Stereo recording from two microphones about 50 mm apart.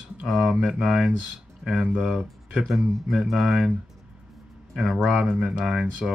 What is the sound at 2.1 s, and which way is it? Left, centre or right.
Speech, centre.